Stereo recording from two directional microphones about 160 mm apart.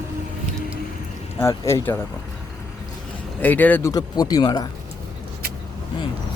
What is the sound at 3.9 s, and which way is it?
Speech, 25° left (ahead or behind).